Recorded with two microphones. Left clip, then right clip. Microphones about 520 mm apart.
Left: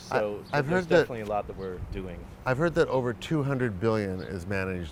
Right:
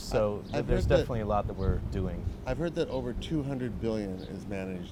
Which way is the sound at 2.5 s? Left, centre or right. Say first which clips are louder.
Left 7 dB; left.